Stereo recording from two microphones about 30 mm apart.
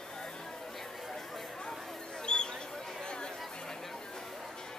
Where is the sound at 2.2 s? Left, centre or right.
Left.